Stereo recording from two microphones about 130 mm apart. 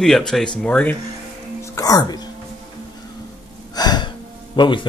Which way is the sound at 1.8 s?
30° left (ahead or behind).